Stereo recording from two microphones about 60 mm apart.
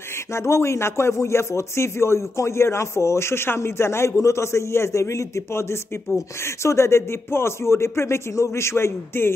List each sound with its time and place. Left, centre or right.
0.3 s speech: left